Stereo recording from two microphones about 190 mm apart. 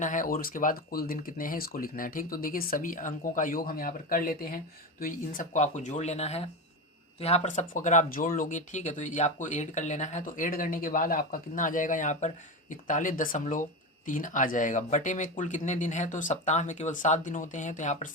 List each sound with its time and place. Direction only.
0.0 s speech: 45° left (ahead or behind)